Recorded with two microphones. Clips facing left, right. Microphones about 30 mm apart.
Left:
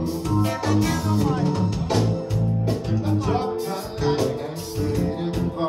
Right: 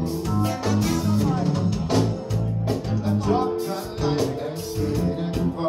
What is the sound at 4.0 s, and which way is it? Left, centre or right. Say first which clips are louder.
Music: left 2 dB; centre.